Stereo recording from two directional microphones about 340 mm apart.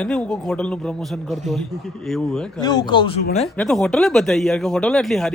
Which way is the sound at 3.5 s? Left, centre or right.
Centre.